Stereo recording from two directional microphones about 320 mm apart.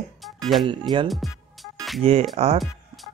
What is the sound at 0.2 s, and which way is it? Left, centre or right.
Music, centre.